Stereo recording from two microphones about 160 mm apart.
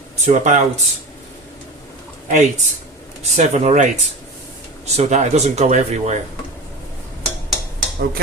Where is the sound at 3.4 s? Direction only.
45° right (ahead or behind).